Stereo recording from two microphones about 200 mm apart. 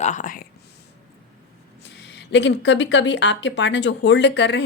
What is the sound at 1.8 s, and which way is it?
Speech, 60° left (ahead or behind).